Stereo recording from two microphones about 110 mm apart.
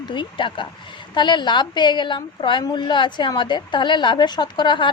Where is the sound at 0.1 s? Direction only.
50° left (ahead or behind).